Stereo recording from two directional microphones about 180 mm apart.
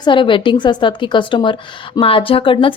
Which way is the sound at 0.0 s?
25° left (ahead or behind).